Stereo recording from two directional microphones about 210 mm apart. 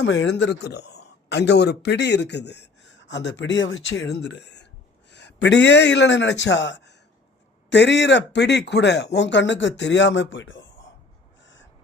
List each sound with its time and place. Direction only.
0.0 s a man's voice: 55° left (ahead or behind)
11.4 s crow: 60° left (ahead or behind)